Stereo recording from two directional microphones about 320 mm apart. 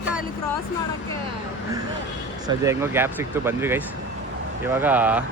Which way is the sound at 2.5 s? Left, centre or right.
Centre.